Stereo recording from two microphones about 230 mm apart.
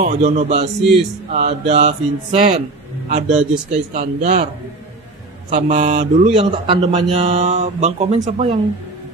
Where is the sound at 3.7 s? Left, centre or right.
Right.